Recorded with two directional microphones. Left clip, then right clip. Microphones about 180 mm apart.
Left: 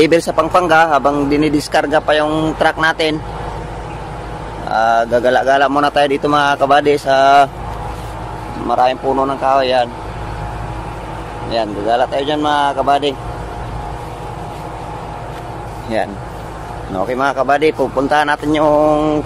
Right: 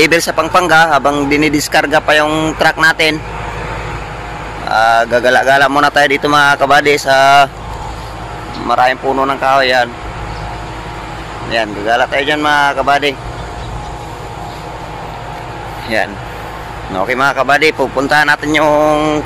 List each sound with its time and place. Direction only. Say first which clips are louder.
0.0 s speech: right 2 dB; 20° left (ahead or behind)
0.4 s speech: right 2 dB; 5° left (ahead or behind)
4.6 s speech: right 3 dB; 5° left (ahead or behind)
8.8 s speech: right 1 dB; 5° right (ahead or behind)
11.5 s speech: right 2 dB; centre (ahead or behind)
16.9 s speech: right 4 dB; 5° left (ahead or behind)